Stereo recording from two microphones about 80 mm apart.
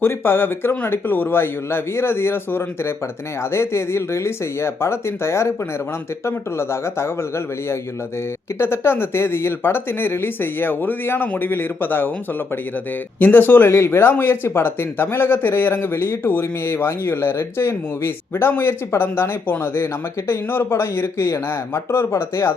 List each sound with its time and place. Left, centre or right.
0.0 s speech: left
13.1 s speech: left